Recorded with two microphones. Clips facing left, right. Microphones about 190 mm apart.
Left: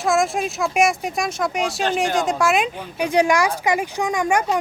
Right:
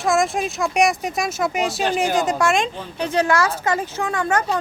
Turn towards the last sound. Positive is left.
turn(degrees=15)  # may be behind; listen again after turning